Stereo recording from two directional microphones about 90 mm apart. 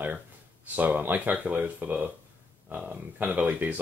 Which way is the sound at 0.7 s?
20° right (ahead or behind).